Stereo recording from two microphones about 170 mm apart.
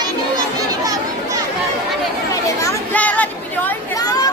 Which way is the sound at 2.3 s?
20° left (ahead or behind).